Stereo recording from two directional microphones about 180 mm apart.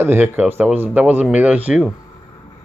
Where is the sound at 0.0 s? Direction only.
10° right (ahead or behind).